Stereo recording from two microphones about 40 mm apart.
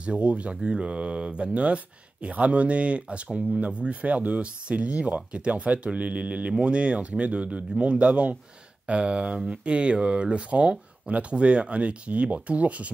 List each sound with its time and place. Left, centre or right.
0.0 s speech: right